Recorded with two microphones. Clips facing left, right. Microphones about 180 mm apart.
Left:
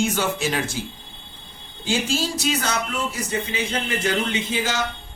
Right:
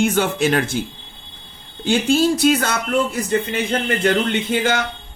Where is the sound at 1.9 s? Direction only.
60° right (ahead or behind).